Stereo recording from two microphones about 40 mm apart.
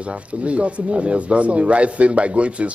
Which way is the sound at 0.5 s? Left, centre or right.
Right.